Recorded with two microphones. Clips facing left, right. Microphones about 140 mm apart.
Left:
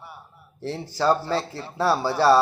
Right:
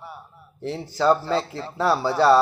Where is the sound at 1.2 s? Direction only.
25° right (ahead or behind).